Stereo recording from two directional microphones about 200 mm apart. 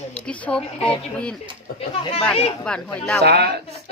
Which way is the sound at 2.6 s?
5° left (ahead or behind).